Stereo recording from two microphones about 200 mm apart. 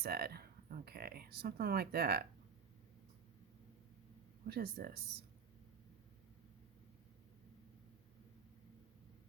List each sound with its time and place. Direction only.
0.0 s speech: 50° right (ahead or behind)
4.4 s speech: 50° right (ahead or behind)